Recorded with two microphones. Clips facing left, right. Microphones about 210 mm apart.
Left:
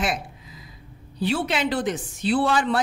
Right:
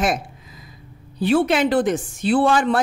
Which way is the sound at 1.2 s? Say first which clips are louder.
Right 7 dB; 50° right (ahead or behind).